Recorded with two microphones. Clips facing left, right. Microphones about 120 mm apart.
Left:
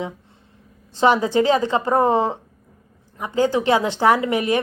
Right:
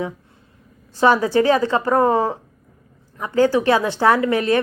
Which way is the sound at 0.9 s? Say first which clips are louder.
Right 1 dB; 20° left (ahead or behind).